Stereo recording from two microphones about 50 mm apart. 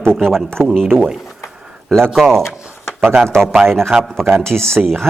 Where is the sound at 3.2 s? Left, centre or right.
Right.